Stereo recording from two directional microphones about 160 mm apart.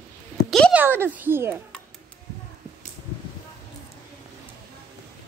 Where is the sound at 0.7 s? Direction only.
15° right (ahead or behind).